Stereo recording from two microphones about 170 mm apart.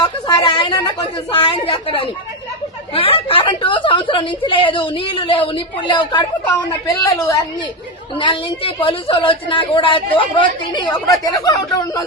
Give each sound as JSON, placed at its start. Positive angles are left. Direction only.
{"t": 0.0, "sound": "a woman's voice", "side_deg": 25}